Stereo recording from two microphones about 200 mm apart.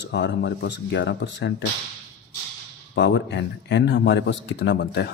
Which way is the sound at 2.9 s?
60° left (ahead or behind).